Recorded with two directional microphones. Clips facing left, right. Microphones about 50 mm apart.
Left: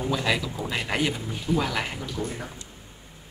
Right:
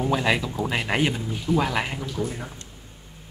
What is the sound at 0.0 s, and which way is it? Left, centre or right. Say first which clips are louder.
Speech: right 3 dB; right.